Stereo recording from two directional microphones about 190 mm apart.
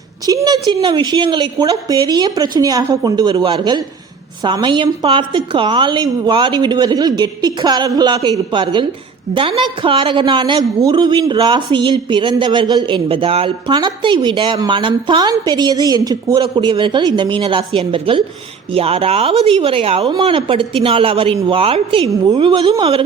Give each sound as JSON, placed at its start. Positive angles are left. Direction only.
{"t": 0.3, "sound": "a woman's voice", "side_deg": -20}